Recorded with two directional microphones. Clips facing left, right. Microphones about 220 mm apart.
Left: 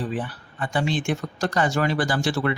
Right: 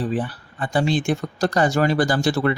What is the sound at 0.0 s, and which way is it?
Speech, 35° right (ahead or behind).